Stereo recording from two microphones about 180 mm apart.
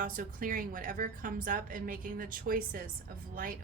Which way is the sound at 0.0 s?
50° right (ahead or behind).